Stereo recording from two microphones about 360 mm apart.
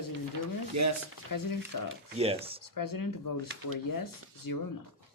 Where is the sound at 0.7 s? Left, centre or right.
Right.